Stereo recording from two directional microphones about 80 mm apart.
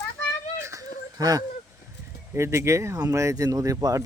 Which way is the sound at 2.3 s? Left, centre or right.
Right.